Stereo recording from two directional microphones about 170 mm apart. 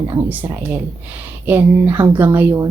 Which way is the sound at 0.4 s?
15° right (ahead or behind).